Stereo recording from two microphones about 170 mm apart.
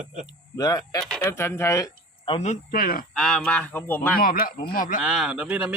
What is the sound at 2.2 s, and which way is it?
Speech, 40° left (ahead or behind).